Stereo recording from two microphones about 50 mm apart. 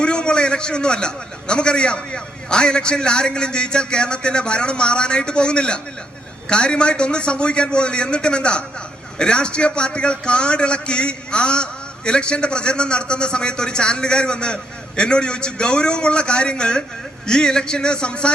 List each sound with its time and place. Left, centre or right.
0.0 s a man's voice: centre